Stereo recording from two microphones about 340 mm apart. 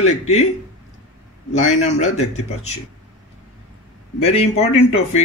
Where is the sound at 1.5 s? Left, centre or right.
Centre.